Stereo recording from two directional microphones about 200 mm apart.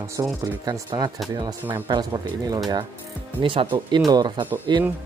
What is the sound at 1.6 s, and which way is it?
Speech, 10° right (ahead or behind).